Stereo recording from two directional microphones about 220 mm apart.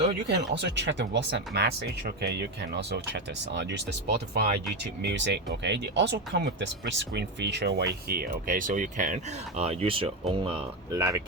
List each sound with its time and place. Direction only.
0.0 s speech: 45° right (ahead or behind); by 11.2 s 15° right (ahead or behind)